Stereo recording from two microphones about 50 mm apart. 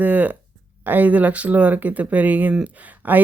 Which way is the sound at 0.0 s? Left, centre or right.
Right.